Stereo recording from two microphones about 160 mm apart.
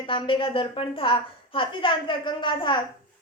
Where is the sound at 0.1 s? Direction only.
35° left (ahead or behind).